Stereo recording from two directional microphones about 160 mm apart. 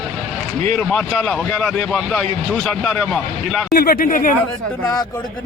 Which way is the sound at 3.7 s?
65° left (ahead or behind).